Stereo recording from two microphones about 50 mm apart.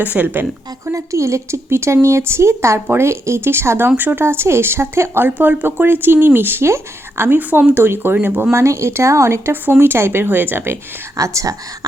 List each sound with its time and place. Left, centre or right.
0.0 s speech: right
0.9 s speech: right
2.9 s speech: right
3.8 s speech: right
6.7 s speech: right
7.7 s speech: right
8.5 s speech: right
9.8 s speech: right
11.2 s speech: right